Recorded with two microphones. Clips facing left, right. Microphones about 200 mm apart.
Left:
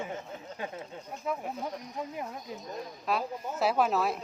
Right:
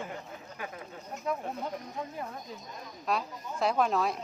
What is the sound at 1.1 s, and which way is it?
Speech, 5° left (ahead or behind).